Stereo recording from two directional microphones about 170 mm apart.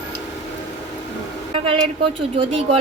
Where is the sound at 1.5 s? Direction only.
35° right (ahead or behind).